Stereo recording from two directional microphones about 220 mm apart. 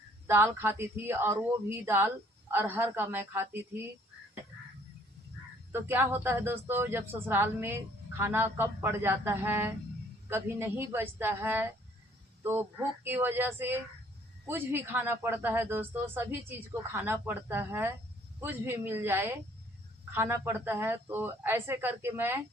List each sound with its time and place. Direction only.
0.3 s speech: 10° right (ahead or behind)
5.7 s speech: 10° right (ahead or behind)